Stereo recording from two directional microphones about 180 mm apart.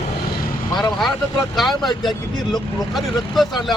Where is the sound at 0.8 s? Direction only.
Centre (ahead or behind).